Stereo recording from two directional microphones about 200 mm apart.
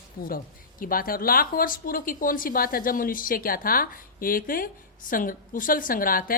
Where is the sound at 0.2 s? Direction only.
45° left (ahead or behind).